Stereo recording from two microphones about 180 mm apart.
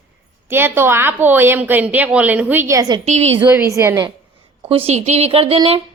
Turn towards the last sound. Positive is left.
turn(degrees=-30)  # may be behind; listen again after turning